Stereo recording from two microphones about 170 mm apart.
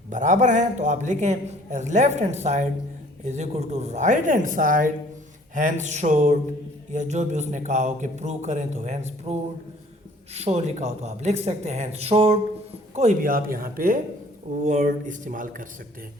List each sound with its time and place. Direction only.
0.1 s a man's voice: 45° right (ahead or behind)
13.0 s speech: 50° right (ahead or behind)
14.6 s a man's voice: 45° right (ahead or behind)